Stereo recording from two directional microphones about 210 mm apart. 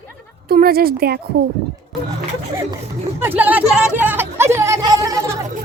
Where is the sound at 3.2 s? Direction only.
10° right (ahead or behind).